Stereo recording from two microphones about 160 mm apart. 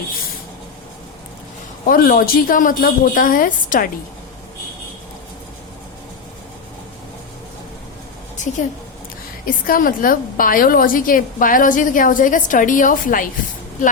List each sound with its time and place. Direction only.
1.9 s a woman's voice: 65° left (ahead or behind)
8.4 s a sound: 50° left (ahead or behind)
9.5 s a woman's voice: 60° left (ahead or behind)